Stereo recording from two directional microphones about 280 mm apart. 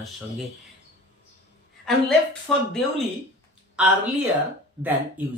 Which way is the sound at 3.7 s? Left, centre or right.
Centre.